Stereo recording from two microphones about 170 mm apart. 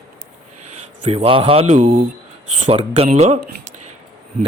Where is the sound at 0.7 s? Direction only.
40° right (ahead or behind).